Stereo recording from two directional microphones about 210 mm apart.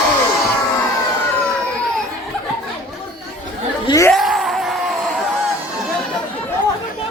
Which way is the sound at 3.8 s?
15° left (ahead or behind).